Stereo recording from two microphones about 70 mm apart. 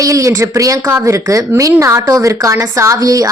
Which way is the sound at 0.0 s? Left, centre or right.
Right.